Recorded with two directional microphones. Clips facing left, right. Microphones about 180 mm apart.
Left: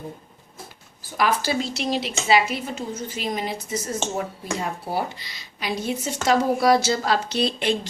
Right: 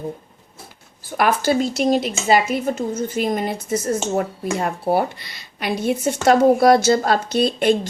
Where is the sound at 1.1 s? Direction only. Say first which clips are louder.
Right 5 dB; 55° right (ahead or behind).